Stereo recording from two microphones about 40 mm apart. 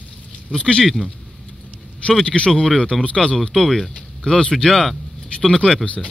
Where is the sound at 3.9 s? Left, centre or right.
Left.